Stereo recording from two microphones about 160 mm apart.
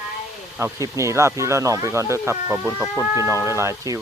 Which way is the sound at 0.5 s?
15° right (ahead or behind).